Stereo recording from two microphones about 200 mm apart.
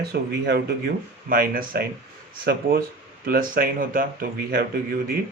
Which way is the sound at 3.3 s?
45° right (ahead or behind).